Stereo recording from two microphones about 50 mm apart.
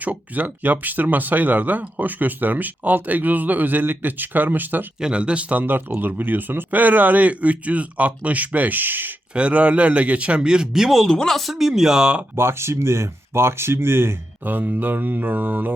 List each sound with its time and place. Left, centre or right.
0.0 s speech: right
4.9 s speech: centre; by 9.1 s right
9.3 s speech: right; by 11.0 s centre
11.0 s speech: centre
11.3 s speech: centre
12.4 s speech: right
14.4 s speech: right